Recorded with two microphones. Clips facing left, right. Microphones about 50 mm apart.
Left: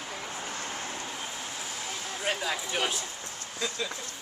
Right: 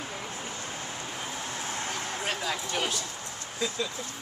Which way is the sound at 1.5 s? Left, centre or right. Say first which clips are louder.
Right 4 dB; right.